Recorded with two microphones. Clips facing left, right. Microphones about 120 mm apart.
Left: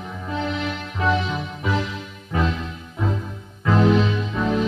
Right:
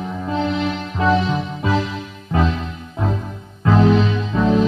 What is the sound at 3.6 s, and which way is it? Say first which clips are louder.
Music: right 3 dB; 20° right (ahead or behind).